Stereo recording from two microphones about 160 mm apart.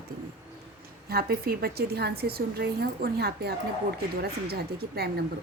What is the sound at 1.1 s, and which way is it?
A woman's voice, 75° right (ahead or behind).